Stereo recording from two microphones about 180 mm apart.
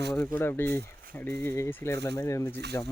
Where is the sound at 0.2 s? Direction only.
15° left (ahead or behind).